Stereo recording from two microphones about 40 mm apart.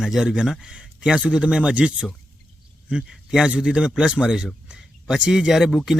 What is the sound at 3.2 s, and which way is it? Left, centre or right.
Speech, centre.